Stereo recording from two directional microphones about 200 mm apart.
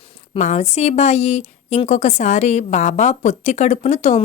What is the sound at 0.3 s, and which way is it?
A woman's voice, 35° left (ahead or behind).